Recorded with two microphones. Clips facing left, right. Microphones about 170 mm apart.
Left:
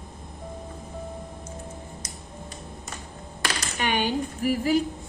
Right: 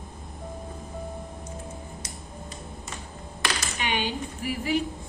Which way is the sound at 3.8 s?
45° left (ahead or behind).